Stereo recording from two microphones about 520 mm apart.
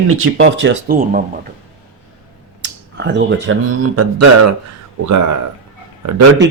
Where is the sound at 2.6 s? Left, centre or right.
Centre.